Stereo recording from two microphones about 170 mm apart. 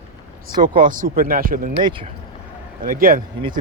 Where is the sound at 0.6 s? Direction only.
25° right (ahead or behind).